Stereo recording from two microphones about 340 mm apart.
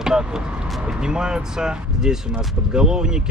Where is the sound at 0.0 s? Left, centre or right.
Centre.